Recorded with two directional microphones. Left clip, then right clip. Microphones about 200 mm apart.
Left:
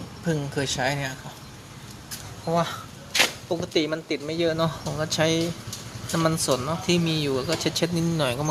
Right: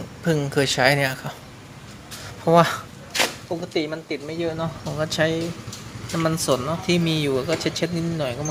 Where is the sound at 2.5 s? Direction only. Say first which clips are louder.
Right 9 dB; 40° right (ahead or behind).